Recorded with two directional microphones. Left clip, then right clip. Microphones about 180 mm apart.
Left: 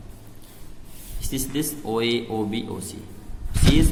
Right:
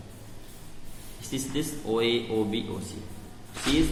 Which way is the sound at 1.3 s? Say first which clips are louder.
Left 4 dB; 45° left (ahead or behind).